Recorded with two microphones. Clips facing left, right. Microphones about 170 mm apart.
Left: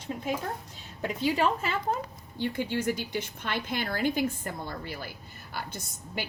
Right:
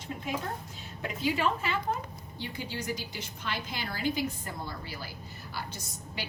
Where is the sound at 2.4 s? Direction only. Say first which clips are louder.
Left 8 dB; 55° left (ahead or behind).